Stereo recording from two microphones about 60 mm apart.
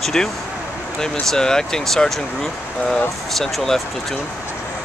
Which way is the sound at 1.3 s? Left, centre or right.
Centre.